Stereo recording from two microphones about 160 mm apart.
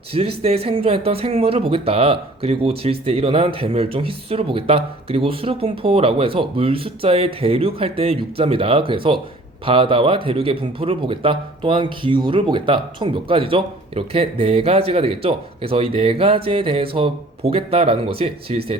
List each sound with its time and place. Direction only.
0.1 s speech: 35° right (ahead or behind)